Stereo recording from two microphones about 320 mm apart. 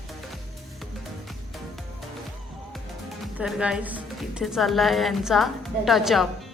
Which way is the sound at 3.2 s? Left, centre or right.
Centre.